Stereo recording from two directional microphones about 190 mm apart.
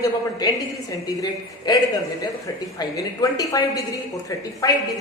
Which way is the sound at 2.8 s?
20° left (ahead or behind).